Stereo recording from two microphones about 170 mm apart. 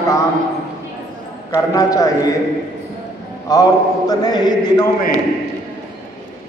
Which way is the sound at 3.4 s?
20° left (ahead or behind).